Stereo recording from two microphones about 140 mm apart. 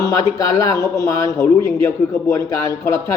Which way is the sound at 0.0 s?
25° left (ahead or behind).